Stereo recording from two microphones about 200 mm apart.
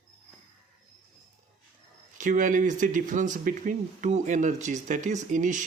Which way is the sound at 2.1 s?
40° right (ahead or behind).